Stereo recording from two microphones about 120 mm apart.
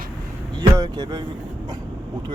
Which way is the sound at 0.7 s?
30° right (ahead or behind).